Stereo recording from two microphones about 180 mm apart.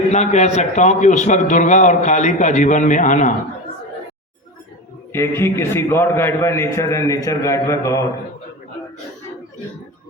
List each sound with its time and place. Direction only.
0.1 s a man's voice: 40° left (ahead or behind)
5.1 s a man's voice: 15° left (ahead or behind)